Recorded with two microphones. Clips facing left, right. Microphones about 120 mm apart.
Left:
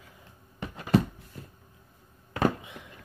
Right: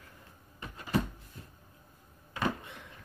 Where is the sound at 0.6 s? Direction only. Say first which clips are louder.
Left 7 dB; 80° left.